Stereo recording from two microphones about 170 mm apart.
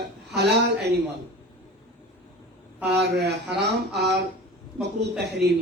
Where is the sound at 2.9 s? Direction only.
80° right.